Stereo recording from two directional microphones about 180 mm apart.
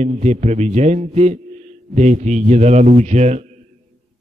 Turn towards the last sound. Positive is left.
turn(degrees=-40)  # may be behind; listen again after turning